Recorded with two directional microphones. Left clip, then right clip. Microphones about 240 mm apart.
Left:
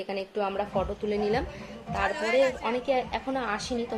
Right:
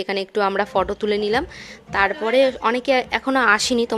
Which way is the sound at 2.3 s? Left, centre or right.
Right.